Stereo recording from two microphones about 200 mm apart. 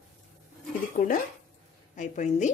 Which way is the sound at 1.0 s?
45° left (ahead or behind).